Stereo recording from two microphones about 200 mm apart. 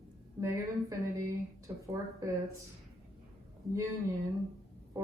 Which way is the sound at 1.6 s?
15° right (ahead or behind).